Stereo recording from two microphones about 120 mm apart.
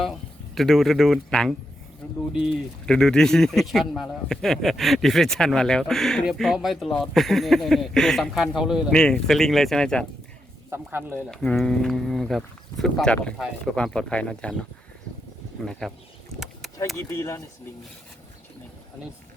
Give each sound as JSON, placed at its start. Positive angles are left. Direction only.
{"t": 0.5, "sound": "a man's voice", "side_deg": 0}
{"t": 2.8, "sound": "a man's voice", "side_deg": 5}
{"t": 10.7, "sound": "speech", "side_deg": -20}
{"t": 11.3, "sound": "a man's voice", "side_deg": 5}
{"t": 15.8, "sound": "a man's voice", "side_deg": 5}
{"t": 16.4, "sound": "vehicle", "side_deg": 0}
{"t": 17.1, "sound": "speech", "side_deg": 25}